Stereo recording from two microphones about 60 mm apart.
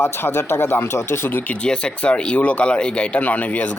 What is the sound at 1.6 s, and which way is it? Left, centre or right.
Speech, centre.